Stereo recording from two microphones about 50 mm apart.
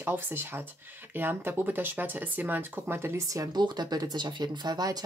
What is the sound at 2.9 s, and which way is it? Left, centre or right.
Speech, right.